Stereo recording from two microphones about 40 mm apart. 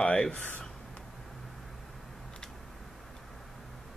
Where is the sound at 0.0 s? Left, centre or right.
Left.